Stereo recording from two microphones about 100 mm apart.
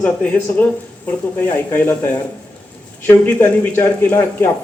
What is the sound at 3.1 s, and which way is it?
A man's voice, 20° left (ahead or behind).